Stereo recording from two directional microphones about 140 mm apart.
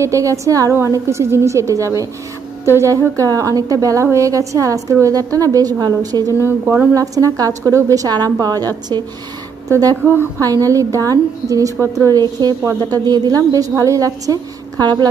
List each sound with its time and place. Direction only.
0.0 s a woman's voice: 20° right (ahead or behind)
6.4 s a woman's voice: 15° right (ahead or behind)
10.0 s a woman's voice: 15° right (ahead or behind)